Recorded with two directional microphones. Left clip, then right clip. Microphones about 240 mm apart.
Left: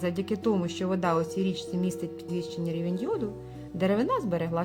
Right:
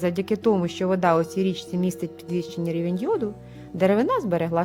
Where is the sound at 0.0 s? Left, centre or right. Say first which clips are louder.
Right 6 dB; right.